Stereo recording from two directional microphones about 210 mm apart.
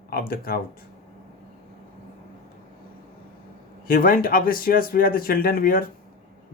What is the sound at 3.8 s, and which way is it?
Speech, 40° left (ahead or behind).